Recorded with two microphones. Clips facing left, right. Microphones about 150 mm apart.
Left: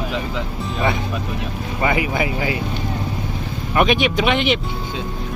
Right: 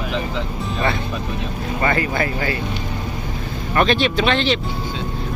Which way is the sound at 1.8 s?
10° left (ahead or behind).